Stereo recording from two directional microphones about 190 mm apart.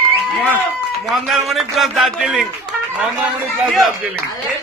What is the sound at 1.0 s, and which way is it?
A man's voice, centre (ahead or behind).